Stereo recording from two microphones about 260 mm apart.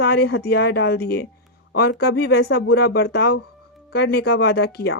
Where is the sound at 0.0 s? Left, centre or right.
Left.